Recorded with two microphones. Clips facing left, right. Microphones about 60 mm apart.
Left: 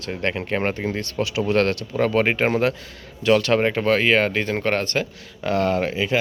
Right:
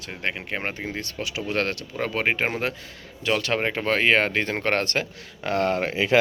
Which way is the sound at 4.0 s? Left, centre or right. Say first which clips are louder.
Left 2 dB; right.